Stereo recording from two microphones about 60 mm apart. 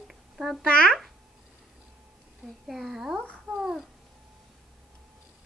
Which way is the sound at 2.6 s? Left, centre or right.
Centre.